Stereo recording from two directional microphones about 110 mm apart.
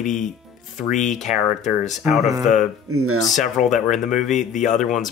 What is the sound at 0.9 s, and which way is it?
Speech, 90° left.